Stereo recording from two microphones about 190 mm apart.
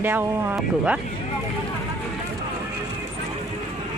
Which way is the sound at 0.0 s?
10° right (ahead or behind).